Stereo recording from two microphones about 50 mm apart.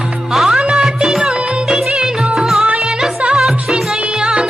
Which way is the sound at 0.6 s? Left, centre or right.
Centre.